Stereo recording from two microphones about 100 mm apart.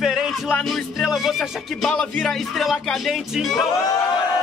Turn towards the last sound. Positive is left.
turn(degrees=0)  # may be behind; listen again after turning